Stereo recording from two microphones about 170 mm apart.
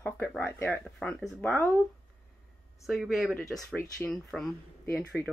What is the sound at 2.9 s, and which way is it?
Speech, centre (ahead or behind).